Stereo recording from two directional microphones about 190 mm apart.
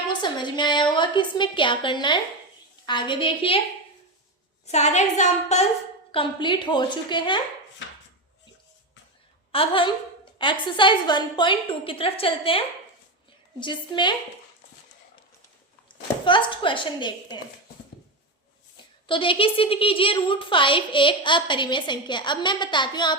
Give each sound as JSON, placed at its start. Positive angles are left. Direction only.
{"t": 0.1, "sound": "a woman's voice", "side_deg": 25}
{"t": 4.6, "sound": "a woman's voice", "side_deg": 35}
{"t": 6.1, "sound": "a woman's voice", "side_deg": 25}
{"t": 9.5, "sound": "a sound", "side_deg": 30}
{"t": 10.3, "sound": "a woman's voice", "side_deg": 25}
{"t": 16.2, "sound": "a woman's voice", "side_deg": 25}
{"t": 19.0, "sound": "a woman's voice", "side_deg": 25}